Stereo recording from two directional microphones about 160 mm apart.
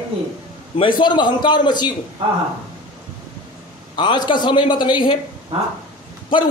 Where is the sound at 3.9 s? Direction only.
30° left (ahead or behind).